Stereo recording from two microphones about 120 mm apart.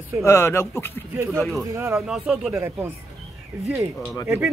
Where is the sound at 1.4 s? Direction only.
Centre (ahead or behind).